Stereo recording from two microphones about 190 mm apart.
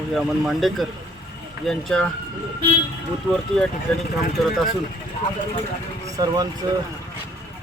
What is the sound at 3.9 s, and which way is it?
Speech, 5° left (ahead or behind).